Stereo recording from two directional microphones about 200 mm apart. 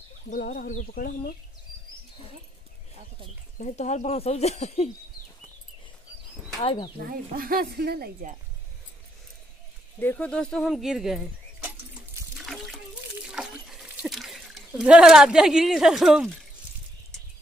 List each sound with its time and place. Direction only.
0.3 s speech: 45° left (ahead or behind)
3.5 s speech: 35° left (ahead or behind)
6.6 s speech: 25° left (ahead or behind)
7.1 s speech: 45° right (ahead or behind)
9.9 s speech: 10° left (ahead or behind)
12.4 s water: centre (ahead or behind)